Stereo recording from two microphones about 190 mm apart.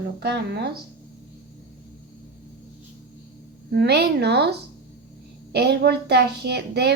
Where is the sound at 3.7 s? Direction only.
60° right (ahead or behind).